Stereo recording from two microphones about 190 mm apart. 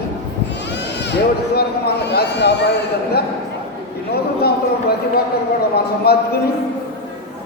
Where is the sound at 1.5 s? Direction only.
60° left (ahead or behind).